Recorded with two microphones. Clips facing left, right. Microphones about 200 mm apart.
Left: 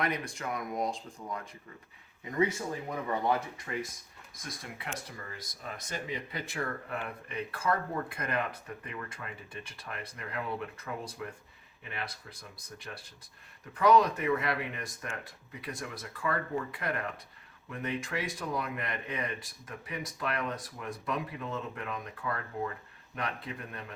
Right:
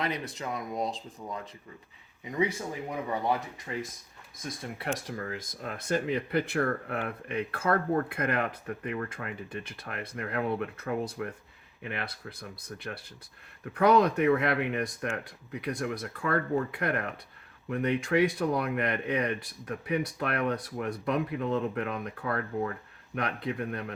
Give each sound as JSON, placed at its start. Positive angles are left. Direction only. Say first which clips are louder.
{"t": 0.0, "sound": "speech", "louder": "right 1 dB", "side_deg": -20}
{"t": 5.0, "sound": "speech", "louder": "right 9 dB", "side_deg": -70}